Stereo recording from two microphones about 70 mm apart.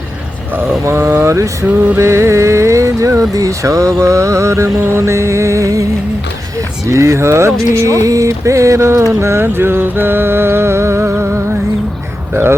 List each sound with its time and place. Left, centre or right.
0.5 s music: right
2.0 s speech: right
6.8 s speech: right
9.2 s music: right
12.3 s music: right